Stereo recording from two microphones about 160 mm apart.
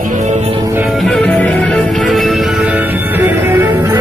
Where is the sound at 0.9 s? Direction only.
5° left (ahead or behind); by 3.9 s 15° right (ahead or behind).